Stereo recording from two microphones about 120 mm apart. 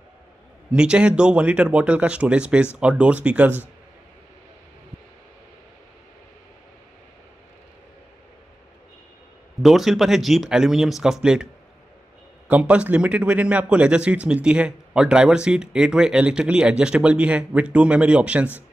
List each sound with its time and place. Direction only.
0.7 s speech: 10° right (ahead or behind)
9.6 s speech: centre (ahead or behind)
12.4 s speech: 10° right (ahead or behind)